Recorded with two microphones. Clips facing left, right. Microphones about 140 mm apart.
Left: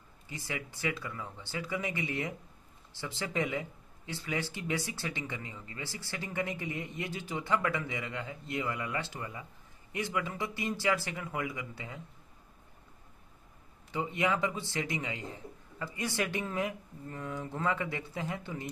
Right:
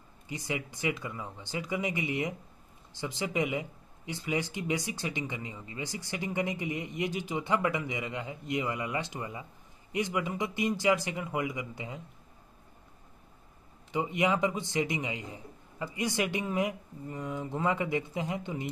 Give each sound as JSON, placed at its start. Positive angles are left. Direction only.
{"t": 0.3, "sound": "speech", "side_deg": -20}
{"t": 13.9, "sound": "speech", "side_deg": -15}